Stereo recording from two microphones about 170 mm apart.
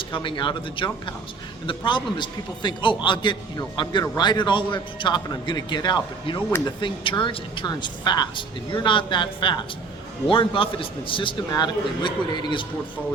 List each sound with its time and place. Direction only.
0.1 s speech: 30° left (ahead or behind)